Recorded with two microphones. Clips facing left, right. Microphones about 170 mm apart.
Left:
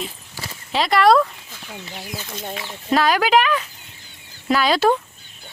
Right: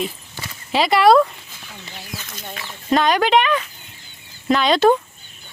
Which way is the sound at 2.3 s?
25° left (ahead or behind).